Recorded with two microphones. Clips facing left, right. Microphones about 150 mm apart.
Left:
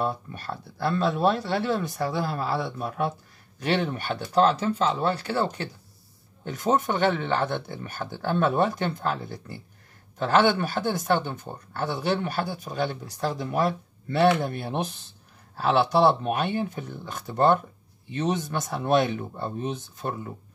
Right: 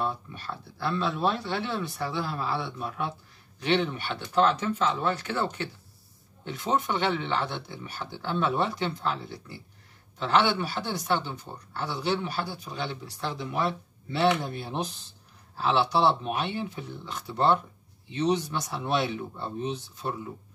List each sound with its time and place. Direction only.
0.0 s speech: 45° left (ahead or behind)